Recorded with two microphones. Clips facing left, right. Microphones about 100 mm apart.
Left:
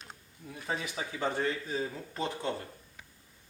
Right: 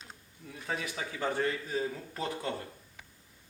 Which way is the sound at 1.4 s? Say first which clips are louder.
Right 1 dB; centre (ahead or behind).